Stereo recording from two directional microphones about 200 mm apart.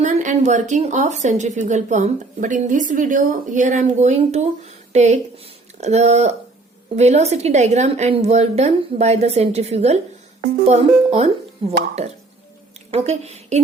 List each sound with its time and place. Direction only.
0.0 s speech: 35° right (ahead or behind)
12.9 s a woman's voice: 35° right (ahead or behind)